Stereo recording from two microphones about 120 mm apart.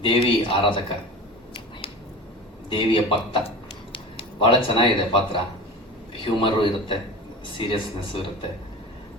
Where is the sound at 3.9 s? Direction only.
45° left (ahead or behind).